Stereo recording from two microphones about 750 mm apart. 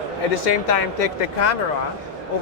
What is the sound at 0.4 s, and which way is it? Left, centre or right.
Speech, left.